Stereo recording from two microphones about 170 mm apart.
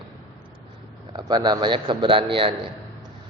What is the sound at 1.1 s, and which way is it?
A man's voice, 25° right (ahead or behind).